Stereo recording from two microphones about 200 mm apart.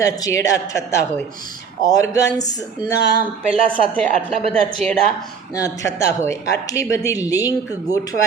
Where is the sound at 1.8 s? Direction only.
15° left (ahead or behind).